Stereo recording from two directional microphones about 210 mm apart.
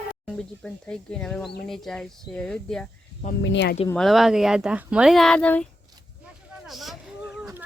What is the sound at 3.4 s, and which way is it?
Speech, 55° left (ahead or behind).